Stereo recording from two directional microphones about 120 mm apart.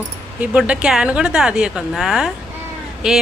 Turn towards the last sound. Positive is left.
turn(degrees=-5)  # may be behind; listen again after turning